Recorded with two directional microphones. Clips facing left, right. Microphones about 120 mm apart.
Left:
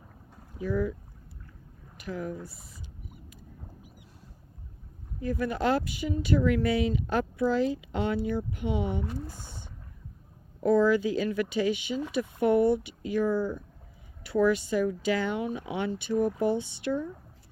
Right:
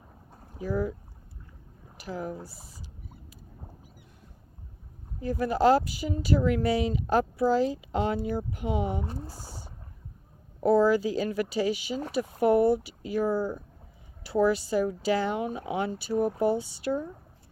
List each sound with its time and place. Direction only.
0.5 s speech: 35° right (ahead or behind)
2.0 s a sound: 35° right (ahead or behind)
5.2 s speech: 35° right (ahead or behind)